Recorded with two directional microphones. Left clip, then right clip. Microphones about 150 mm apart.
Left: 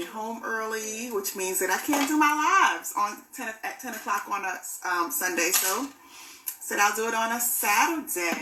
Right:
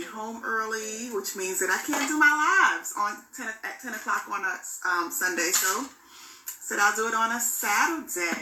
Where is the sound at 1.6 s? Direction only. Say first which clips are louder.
Left 1 dB; 20° left (ahead or behind).